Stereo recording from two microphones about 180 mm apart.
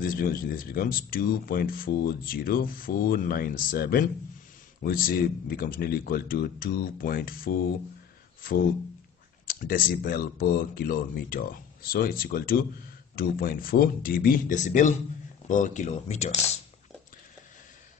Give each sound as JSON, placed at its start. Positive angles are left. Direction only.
{"t": 0.0, "sound": "speech", "side_deg": 55}
{"t": 9.5, "sound": "speech", "side_deg": 50}